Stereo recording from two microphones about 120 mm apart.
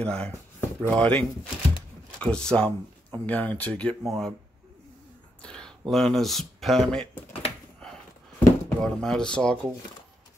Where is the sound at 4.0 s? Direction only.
Centre (ahead or behind).